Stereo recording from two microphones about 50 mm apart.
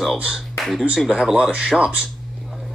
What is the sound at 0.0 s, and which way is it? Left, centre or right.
Speech, centre.